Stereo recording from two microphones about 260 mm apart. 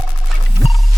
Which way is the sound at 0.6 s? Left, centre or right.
Left.